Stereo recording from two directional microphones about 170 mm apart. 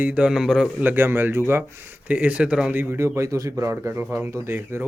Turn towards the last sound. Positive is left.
turn(degrees=-15)  # may be behind; listen again after turning